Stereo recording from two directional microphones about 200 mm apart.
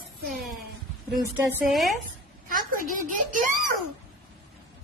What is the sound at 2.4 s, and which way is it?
A woman's voice, 45° right (ahead or behind).